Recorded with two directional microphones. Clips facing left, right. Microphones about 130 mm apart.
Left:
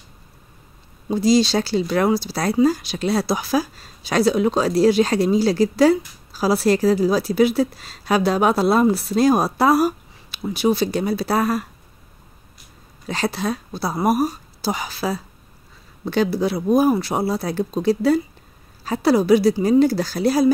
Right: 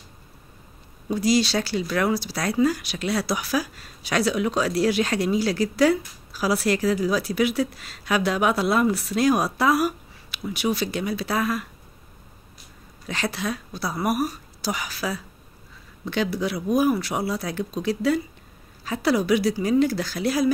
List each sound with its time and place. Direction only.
1.0 s speech: 25° left (ahead or behind)
13.0 s speech: 35° left (ahead or behind)